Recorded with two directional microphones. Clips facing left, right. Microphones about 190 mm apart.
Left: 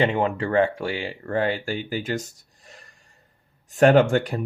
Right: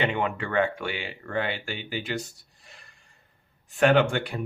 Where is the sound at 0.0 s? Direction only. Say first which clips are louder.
Left 5 dB; 35° left (ahead or behind).